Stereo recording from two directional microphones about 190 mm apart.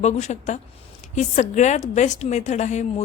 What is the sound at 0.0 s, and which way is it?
A woman's voice, 35° left (ahead or behind).